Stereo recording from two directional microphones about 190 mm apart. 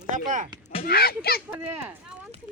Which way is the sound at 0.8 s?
50° left (ahead or behind).